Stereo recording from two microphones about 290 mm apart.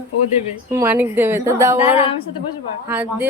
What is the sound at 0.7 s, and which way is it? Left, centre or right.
A woman's voice, centre.